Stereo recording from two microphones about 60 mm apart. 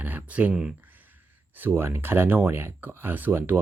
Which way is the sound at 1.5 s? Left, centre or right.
Right.